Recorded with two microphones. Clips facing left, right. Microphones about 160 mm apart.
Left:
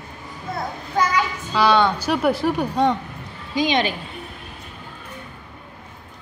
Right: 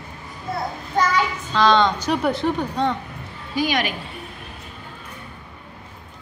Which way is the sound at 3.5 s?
25° left (ahead or behind).